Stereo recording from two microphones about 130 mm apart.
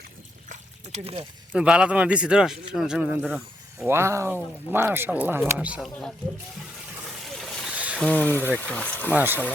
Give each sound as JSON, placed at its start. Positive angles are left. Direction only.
{"t": 0.4, "sound": "liquid", "side_deg": -70}
{"t": 1.5, "sound": "speech", "side_deg": -5}
{"t": 3.8, "sound": "speech", "side_deg": -20}
{"t": 7.3, "sound": "boat", "side_deg": 0}
{"t": 7.7, "sound": "a sound", "side_deg": -10}
{"t": 7.9, "sound": "speech", "side_deg": 10}
{"t": 9.1, "sound": "speech", "side_deg": -15}